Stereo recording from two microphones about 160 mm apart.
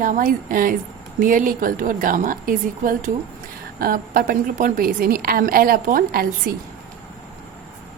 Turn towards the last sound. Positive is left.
turn(degrees=-65)  # may be behind; listen again after turning